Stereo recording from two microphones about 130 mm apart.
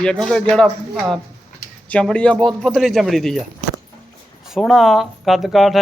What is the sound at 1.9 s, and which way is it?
A man's voice, 10° left (ahead or behind).